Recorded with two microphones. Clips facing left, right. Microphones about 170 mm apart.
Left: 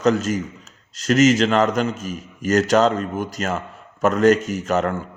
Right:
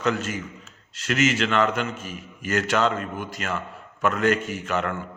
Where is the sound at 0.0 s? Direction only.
40° left (ahead or behind).